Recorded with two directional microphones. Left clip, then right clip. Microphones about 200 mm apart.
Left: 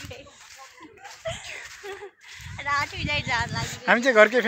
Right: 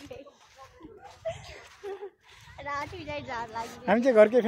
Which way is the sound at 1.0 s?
Centre (ahead or behind).